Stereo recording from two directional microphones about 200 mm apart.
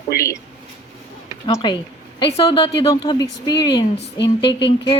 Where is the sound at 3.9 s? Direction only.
60° left (ahead or behind).